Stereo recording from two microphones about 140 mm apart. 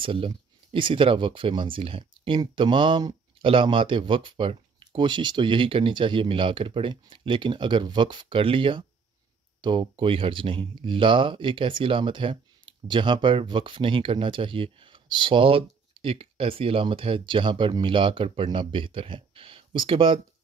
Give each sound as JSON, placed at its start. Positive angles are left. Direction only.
{"t": 0.0, "sound": "speech", "side_deg": -40}